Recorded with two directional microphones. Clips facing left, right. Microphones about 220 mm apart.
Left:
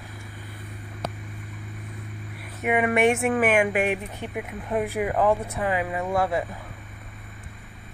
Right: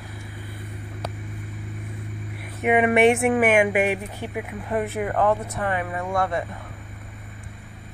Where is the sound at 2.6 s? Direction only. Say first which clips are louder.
Right 4 dB; 20° right (ahead or behind); by 6.4 s 5° left (ahead or behind).